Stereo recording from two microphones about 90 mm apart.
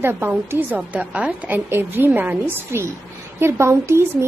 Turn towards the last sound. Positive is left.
turn(degrees=-30)  # may be behind; listen again after turning